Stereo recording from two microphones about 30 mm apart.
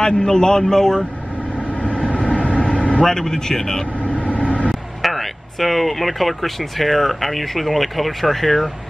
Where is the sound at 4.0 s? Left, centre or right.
Left.